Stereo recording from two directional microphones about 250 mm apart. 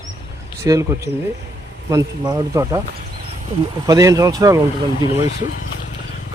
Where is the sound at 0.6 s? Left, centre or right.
Centre.